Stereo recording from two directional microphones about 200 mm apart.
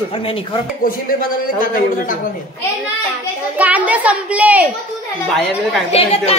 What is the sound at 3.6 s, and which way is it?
A child's voice, 5° right (ahead or behind).